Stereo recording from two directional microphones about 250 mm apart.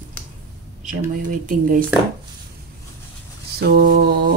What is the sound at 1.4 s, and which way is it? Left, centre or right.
Speech, right.